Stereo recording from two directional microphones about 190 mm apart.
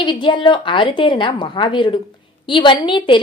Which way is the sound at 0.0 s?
25° left (ahead or behind).